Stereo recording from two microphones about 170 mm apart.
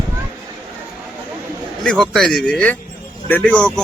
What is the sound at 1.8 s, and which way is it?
A man's voice, 5° left (ahead or behind).